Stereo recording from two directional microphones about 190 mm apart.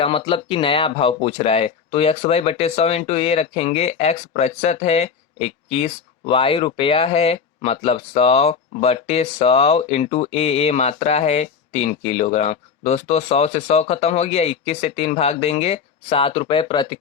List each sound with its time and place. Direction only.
0.0 s speech: 30° left (ahead or behind)